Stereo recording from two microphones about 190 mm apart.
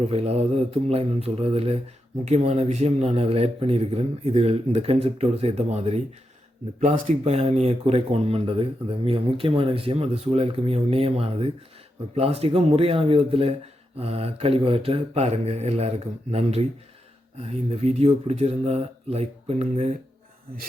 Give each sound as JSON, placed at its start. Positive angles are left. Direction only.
{"t": 0.0, "sound": "a man's voice", "side_deg": -35}